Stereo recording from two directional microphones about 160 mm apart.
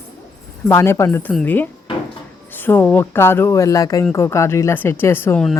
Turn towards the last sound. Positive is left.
turn(degrees=15)  # may be behind; listen again after turning